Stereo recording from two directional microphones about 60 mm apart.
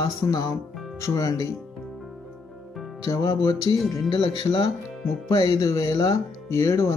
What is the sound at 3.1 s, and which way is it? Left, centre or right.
Music, left.